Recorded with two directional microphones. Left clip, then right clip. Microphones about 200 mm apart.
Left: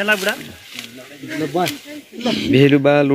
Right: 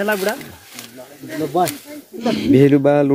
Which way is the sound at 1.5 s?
20° left (ahead or behind).